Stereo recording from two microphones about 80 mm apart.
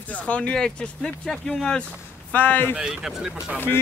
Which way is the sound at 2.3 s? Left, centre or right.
Centre.